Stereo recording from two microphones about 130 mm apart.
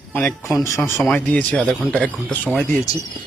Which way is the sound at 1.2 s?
10° left (ahead or behind).